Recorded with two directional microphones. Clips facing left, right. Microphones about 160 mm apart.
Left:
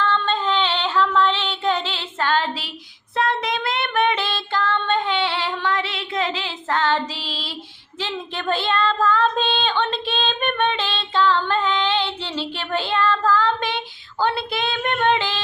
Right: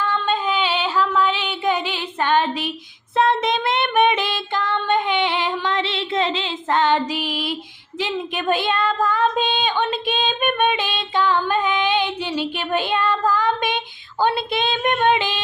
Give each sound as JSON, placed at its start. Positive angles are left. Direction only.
{"t": 0.0, "sound": "female singing", "side_deg": -10}
{"t": 3.2, "sound": "child singing", "side_deg": -25}
{"t": 7.9, "sound": "speech", "side_deg": -15}